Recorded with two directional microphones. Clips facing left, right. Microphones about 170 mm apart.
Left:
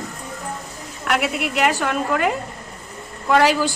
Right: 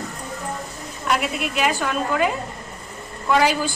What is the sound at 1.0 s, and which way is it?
A woman's voice, 75° left (ahead or behind).